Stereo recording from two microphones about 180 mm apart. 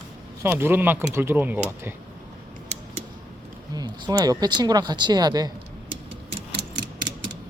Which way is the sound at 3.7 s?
20° right (ahead or behind).